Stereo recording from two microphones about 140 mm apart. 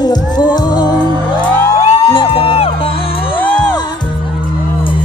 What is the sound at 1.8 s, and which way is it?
Music, 40° left (ahead or behind).